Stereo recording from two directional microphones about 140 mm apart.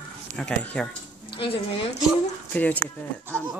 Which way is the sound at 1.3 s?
40° left (ahead or behind).